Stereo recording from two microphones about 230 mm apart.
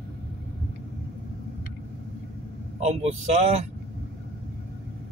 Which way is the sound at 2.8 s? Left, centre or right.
Right.